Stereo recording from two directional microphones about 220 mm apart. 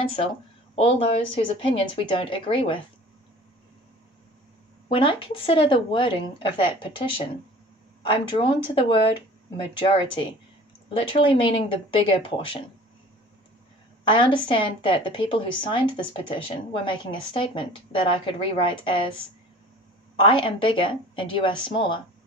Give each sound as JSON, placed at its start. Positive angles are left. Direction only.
{"t": 0.7, "sound": "a woman's voice", "side_deg": 25}
{"t": 4.8, "sound": "a woman's voice", "side_deg": 25}
{"t": 14.0, "sound": "a woman's voice", "side_deg": 20}